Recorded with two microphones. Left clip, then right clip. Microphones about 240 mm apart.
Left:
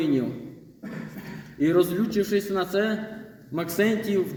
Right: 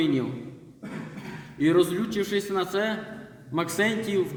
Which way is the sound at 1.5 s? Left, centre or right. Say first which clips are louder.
Even; centre.